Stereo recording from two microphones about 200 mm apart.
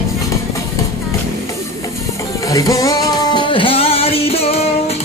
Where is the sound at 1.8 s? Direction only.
15° left (ahead or behind).